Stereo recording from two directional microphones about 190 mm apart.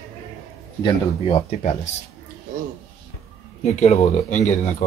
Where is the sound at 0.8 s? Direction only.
30° left (ahead or behind).